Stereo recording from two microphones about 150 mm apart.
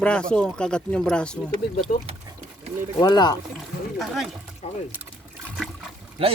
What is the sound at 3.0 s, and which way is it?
Speech, 25° left (ahead or behind).